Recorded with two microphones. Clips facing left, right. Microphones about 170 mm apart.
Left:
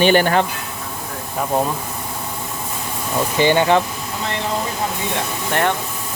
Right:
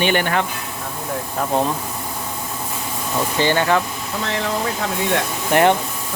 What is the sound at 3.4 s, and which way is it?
Speech, 15° left (ahead or behind).